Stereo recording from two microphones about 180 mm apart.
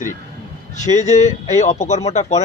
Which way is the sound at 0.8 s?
40° left (ahead or behind).